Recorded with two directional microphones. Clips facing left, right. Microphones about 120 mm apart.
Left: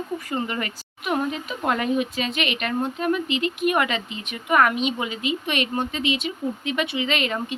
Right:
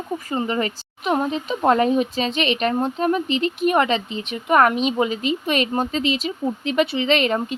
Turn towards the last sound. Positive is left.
turn(degrees=-35)  # may be behind; listen again after turning